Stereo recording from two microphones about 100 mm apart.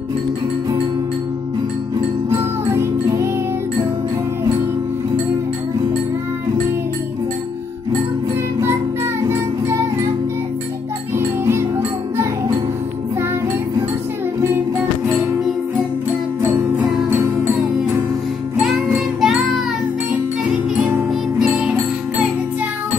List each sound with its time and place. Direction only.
2.3 s music: 30° right (ahead or behind)
9.3 s music: 25° right (ahead or behind)
11.1 s music: 25° right (ahead or behind)
18.9 s music: centre (ahead or behind)
21.4 s music: 10° right (ahead or behind)